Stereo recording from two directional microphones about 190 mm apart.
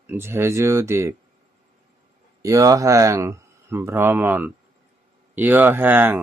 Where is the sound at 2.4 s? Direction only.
15° right (ahead or behind).